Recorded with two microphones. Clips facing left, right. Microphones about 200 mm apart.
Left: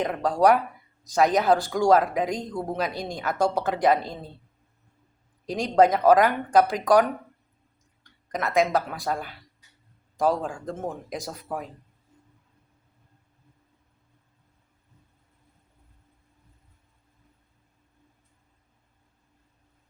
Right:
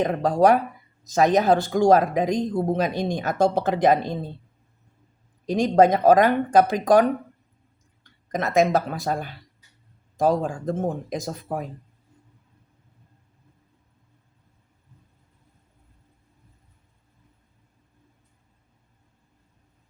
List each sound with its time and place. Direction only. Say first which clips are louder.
0.0 s speech: right 3 dB; 25° right (ahead or behind)
5.8 s speech: right 1 dB; 25° right (ahead or behind)
8.3 s speech: right 3 dB; 25° right (ahead or behind)